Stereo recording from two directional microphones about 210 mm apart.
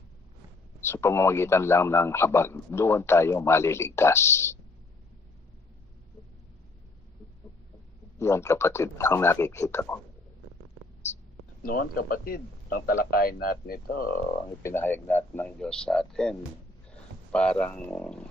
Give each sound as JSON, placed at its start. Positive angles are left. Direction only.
{"t": 0.8, "sound": "speech", "side_deg": 10}
{"t": 8.2, "sound": "speech", "side_deg": 10}
{"t": 11.6, "sound": "speech", "side_deg": 45}
{"t": 14.6, "sound": "a man's voice", "side_deg": 10}